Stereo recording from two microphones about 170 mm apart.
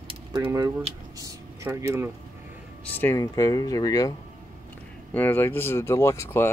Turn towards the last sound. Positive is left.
turn(degrees=15)  # may be behind; listen again after turning